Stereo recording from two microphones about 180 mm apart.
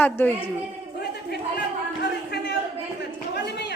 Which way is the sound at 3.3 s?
65° left (ahead or behind).